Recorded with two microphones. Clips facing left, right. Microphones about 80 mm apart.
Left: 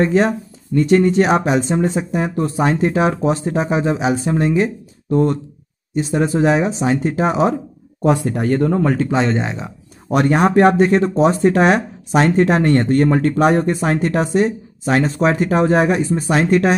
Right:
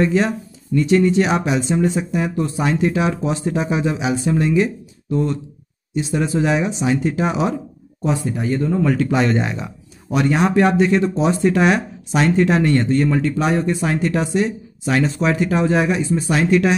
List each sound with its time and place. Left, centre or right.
0.0 s speech: left
8.0 s speech: left
8.8 s speech: left
10.1 s speech: left